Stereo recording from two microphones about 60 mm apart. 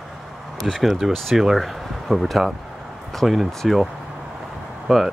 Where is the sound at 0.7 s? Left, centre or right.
Centre.